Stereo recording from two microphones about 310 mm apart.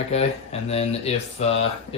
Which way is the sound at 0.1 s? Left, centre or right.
Centre.